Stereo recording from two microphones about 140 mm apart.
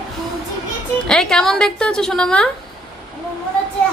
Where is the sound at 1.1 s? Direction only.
5° left (ahead or behind).